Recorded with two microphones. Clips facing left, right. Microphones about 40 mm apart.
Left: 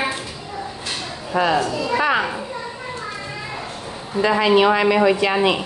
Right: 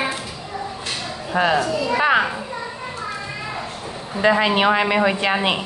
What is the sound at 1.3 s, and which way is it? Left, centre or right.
Speech, centre.